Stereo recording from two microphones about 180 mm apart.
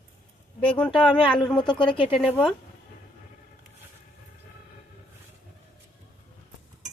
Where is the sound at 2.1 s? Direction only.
Centre (ahead or behind).